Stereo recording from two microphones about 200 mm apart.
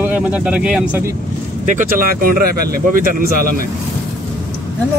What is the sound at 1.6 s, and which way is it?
Speech, 40° right (ahead or behind).